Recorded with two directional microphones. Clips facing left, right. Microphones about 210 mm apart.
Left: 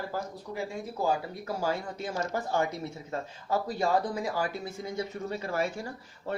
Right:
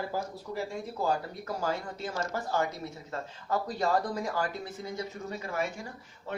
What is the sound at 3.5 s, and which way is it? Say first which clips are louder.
Speech: left 1 dB; 10° left (ahead or behind).